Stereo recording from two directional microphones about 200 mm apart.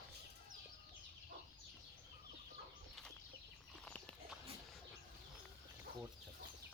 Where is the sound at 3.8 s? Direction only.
5° left (ahead or behind).